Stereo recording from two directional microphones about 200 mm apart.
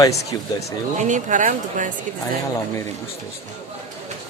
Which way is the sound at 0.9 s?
40° right (ahead or behind).